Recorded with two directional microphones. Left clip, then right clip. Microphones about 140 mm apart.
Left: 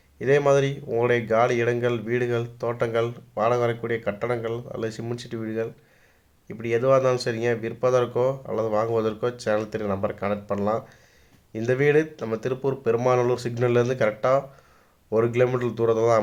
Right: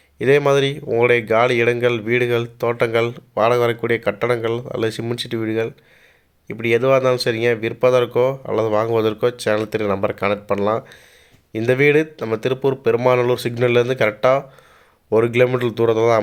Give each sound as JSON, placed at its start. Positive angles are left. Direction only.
{"t": 0.2, "sound": "speech", "side_deg": -30}